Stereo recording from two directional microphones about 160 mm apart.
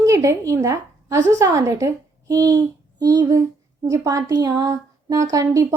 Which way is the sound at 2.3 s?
20° right (ahead or behind).